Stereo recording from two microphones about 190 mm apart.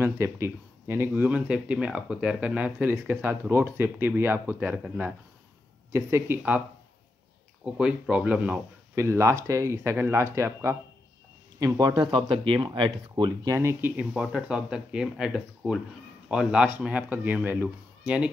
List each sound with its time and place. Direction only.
0.0 s speech: 15° right (ahead or behind)
7.6 s speech: 5° right (ahead or behind)